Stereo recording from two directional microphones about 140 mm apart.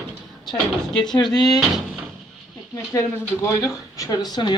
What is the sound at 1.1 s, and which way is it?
Speech, 30° left (ahead or behind).